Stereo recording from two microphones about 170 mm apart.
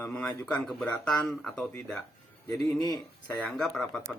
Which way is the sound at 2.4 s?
20° left (ahead or behind).